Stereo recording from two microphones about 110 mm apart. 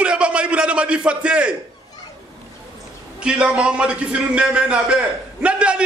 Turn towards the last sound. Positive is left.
turn(degrees=-10)  # may be behind; listen again after turning